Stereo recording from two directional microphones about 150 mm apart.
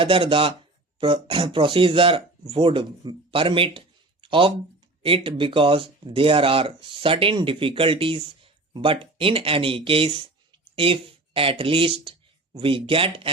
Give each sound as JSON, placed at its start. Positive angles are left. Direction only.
{"t": 0.0, "sound": "speech", "side_deg": -35}